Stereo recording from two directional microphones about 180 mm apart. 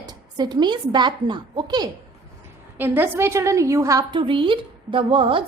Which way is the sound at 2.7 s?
10° right (ahead or behind).